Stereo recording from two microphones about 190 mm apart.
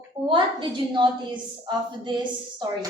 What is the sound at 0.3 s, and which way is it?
A woman's voice, 25° right (ahead or behind).